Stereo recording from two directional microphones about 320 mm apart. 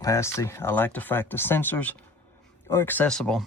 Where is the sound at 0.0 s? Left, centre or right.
Centre.